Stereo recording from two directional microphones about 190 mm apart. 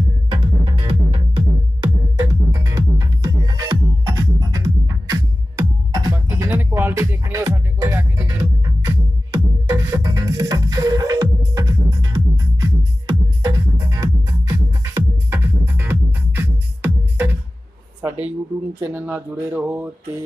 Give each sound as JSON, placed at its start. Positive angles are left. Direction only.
{"t": 0.3, "sound": "music", "side_deg": -25}
{"t": 18.0, "sound": "a sound", "side_deg": -10}
{"t": 18.8, "sound": "speech", "side_deg": -10}